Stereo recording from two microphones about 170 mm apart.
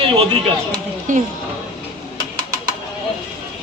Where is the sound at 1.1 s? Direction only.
50° right (ahead or behind).